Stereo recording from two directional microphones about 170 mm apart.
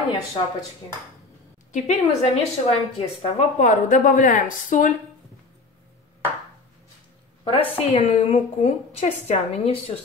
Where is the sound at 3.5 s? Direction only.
45° left (ahead or behind).